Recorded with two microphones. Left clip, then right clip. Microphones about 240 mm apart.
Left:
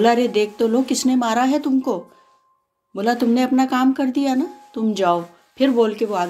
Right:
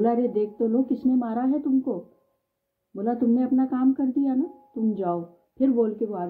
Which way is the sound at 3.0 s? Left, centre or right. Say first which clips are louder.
Left 7 dB; left.